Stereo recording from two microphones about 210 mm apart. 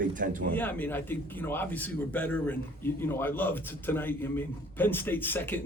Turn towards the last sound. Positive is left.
turn(degrees=10)  # may be behind; listen again after turning